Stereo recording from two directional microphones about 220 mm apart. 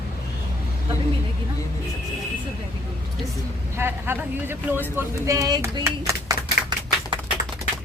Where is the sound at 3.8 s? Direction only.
10° right (ahead or behind).